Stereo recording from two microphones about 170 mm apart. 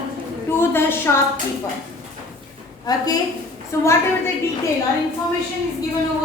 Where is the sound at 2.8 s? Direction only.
20° left (ahead or behind).